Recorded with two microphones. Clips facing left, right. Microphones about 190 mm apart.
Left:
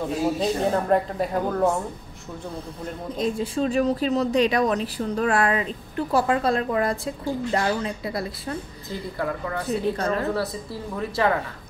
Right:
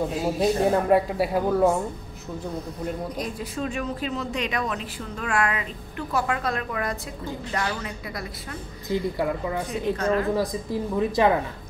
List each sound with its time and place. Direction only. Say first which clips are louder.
0.4 s speech: right 2 dB; 10° right (ahead or behind)
3.2 s a woman's voice: left 6 dB; 30° left (ahead or behind)
8.8 s speech: right 5 dB; 15° right (ahead or behind)
9.9 s speech: right 2 dB; 35° left (ahead or behind)
10.3 s speech: right 3 dB; 15° right (ahead or behind)